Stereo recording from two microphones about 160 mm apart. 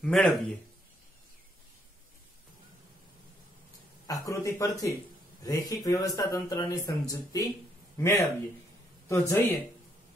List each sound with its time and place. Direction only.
0.0 s a man's voice: 5° left (ahead or behind)
4.1 s speech: 20° left (ahead or behind)
9.3 s speech: 15° left (ahead or behind)